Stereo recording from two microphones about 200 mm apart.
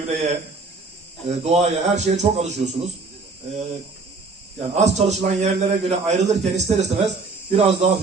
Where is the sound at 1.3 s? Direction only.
35° right (ahead or behind).